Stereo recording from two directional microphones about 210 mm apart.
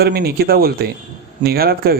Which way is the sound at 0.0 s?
50° right (ahead or behind).